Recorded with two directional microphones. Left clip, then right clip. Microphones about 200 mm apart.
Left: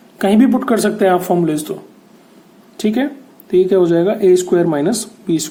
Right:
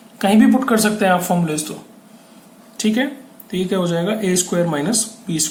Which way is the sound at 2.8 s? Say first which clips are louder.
Left 2 dB; 40° left (ahead or behind).